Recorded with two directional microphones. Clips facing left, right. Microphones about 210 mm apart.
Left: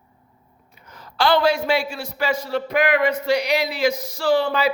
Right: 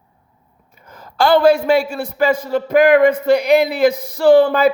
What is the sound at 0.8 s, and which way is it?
A man's voice, 50° right (ahead or behind).